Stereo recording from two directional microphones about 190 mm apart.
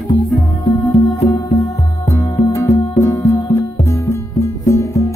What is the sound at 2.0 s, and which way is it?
Music, 15° left (ahead or behind).